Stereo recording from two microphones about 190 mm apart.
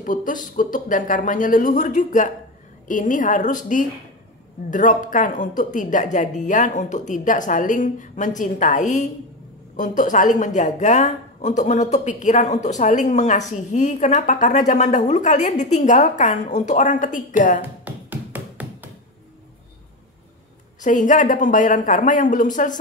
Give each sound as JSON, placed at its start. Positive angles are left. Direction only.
{"t": 0.0, "sound": "a woman's voice", "side_deg": 45}
{"t": 17.8, "sound": "music", "side_deg": -10}
{"t": 20.8, "sound": "speech", "side_deg": 40}